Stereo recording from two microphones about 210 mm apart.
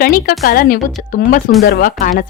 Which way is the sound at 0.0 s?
45° left (ahead or behind).